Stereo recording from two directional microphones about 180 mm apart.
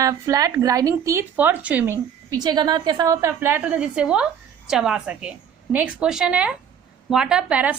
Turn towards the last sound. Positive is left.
turn(degrees=-5)  # may be behind; listen again after turning